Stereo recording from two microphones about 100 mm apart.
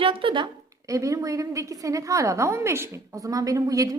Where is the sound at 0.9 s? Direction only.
30° right (ahead or behind).